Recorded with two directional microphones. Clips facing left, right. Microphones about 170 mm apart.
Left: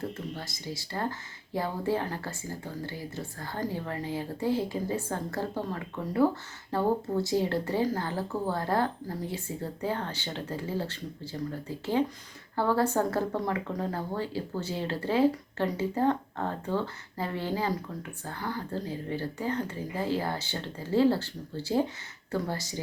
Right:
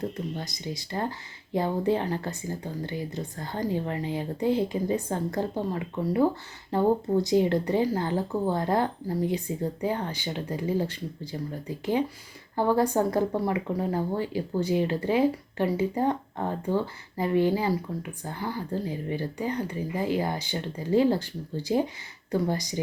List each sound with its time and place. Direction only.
0.3 s speech: 20° right (ahead or behind)